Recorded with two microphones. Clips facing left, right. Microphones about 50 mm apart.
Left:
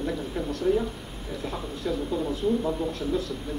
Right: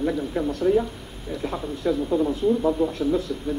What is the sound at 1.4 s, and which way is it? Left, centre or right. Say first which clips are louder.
Speech: right 6 dB; right.